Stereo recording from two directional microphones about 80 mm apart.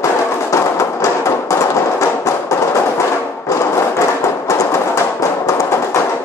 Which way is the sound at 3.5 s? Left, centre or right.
Left.